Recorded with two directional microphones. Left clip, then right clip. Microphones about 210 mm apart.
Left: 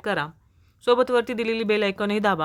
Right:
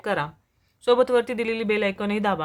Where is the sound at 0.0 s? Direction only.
20° left (ahead or behind).